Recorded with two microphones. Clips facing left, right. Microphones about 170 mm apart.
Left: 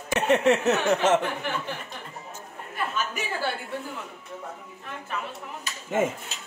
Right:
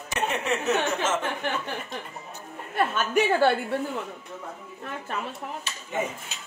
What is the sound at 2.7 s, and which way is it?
Speech, 65° right (ahead or behind).